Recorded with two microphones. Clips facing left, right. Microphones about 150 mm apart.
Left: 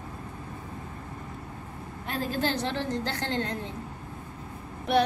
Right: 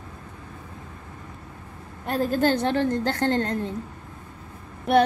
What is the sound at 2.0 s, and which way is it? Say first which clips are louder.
A woman's voice: right 7 dB; 45° right (ahead or behind).